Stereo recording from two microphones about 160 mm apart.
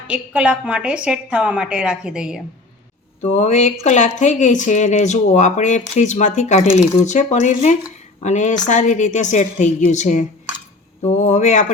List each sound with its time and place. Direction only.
0.1 s a woman's voice: 10° right (ahead or behind)
3.2 s speech: 45° left (ahead or behind)